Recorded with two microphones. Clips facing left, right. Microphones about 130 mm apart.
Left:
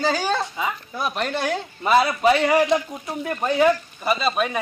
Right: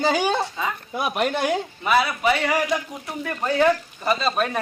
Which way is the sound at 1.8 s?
30° left (ahead or behind).